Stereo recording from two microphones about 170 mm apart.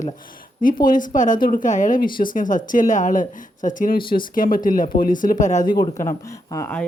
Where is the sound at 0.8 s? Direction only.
50° left (ahead or behind).